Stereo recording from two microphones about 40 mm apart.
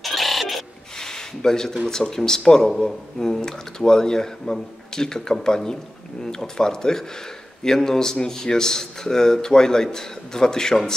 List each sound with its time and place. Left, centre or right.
0.0 s printer: centre
0.9 s a sound: centre
1.9 s speech: centre